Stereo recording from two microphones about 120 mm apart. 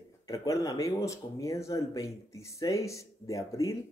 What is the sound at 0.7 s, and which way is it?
Speech, 25° left (ahead or behind).